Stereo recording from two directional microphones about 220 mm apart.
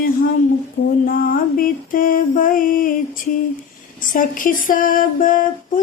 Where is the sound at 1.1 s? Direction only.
40° left (ahead or behind).